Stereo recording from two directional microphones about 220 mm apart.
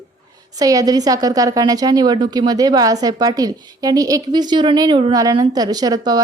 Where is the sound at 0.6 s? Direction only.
15° right (ahead or behind).